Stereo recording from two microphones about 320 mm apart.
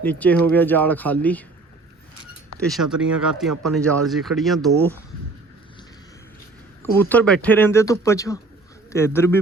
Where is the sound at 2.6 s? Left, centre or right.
Centre.